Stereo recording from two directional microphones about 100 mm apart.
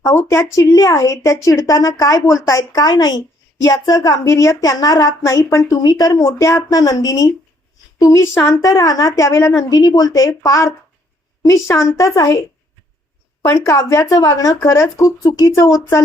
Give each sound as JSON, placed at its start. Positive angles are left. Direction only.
{"t": 0.0, "sound": "speech", "side_deg": 30}
{"t": 11.9, "sound": "speech", "side_deg": 35}
{"t": 13.4, "sound": "speech", "side_deg": 30}